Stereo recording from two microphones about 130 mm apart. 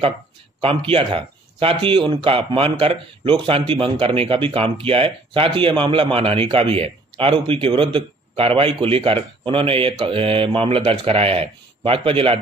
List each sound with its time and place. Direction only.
0.6 s speech: 45° right (ahead or behind)